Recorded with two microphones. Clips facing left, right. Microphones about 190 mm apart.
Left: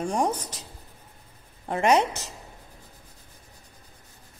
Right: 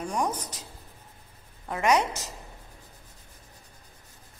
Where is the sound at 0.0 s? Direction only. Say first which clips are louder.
Left 4 dB; 30° left (ahead or behind).